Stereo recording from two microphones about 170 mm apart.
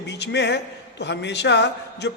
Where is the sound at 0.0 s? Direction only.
85° left.